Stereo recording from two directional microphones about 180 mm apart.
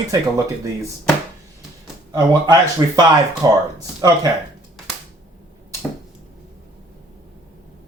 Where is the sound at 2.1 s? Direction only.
20° right (ahead or behind).